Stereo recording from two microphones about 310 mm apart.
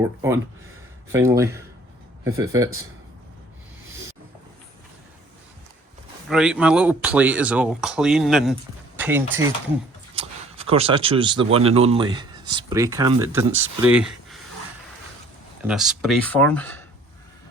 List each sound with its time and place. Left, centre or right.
0.0 s speech: centre
6.2 s speech: centre
10.2 s speech: centre
15.6 s speech: centre